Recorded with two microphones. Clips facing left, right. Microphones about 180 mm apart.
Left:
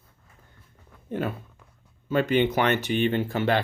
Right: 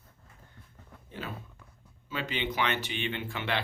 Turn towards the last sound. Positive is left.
turn(degrees=40)  # may be behind; listen again after turning